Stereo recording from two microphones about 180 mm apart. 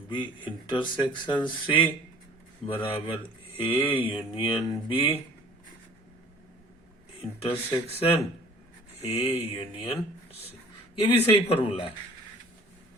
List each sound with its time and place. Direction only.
0.1 s speech: 25° left (ahead or behind)
7.2 s speech: 30° left (ahead or behind)
11.0 s speech: 30° left (ahead or behind)